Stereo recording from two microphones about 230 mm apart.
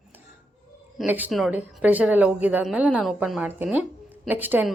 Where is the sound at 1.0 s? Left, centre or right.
Centre.